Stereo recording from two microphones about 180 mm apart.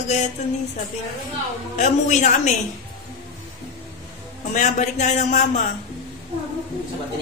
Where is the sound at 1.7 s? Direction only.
40° left (ahead or behind).